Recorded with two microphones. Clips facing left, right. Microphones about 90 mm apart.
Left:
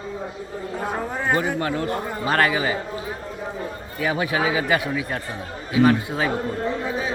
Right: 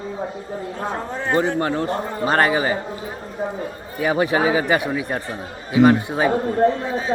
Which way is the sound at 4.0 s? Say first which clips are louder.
Right 4 dB; 30° right (ahead or behind).